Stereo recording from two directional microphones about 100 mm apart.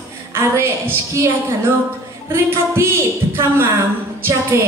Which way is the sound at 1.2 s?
30° right (ahead or behind).